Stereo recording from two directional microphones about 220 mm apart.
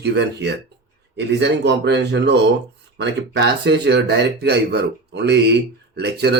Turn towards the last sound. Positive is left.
turn(degrees=-50)  # may be behind; listen again after turning